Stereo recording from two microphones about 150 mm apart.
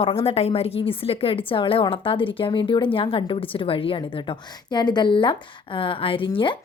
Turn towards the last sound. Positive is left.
turn(degrees=35)  # may be behind; listen again after turning